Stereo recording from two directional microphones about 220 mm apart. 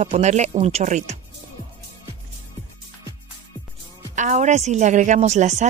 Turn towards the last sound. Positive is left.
turn(degrees=-30)  # may be behind; listen again after turning